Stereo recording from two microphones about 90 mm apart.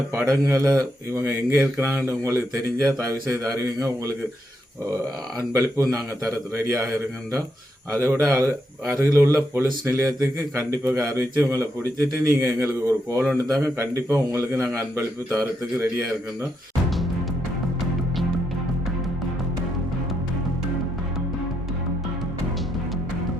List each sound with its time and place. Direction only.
0.1 s speech: 30° right (ahead or behind)
5.4 s speech: 35° right (ahead or behind)